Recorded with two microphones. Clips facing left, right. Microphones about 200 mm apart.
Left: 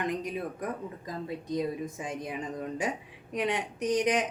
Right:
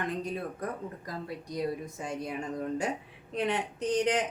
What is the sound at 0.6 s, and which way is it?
A woman's voice, 20° left (ahead or behind).